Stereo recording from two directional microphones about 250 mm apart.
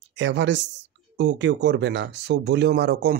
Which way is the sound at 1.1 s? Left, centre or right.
Right.